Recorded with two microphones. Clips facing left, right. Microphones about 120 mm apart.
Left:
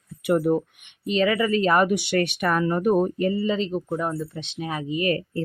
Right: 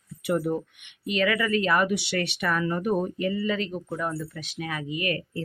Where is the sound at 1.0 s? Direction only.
30° left (ahead or behind).